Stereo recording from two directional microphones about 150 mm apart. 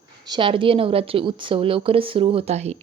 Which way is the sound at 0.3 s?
35° right (ahead or behind).